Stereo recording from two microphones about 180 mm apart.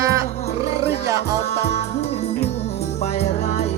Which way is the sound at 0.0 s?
15° right (ahead or behind).